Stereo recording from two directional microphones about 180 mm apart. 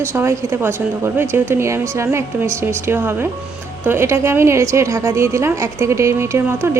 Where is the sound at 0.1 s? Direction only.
15° right (ahead or behind).